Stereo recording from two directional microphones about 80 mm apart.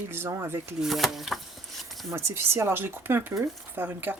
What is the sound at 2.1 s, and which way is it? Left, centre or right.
Speech, right.